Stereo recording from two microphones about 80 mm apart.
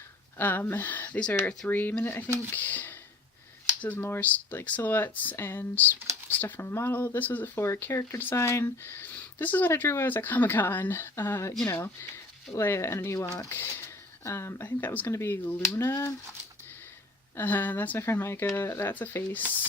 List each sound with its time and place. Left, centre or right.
0.3 s speech: left
12.5 s speech: left
17.3 s speech: left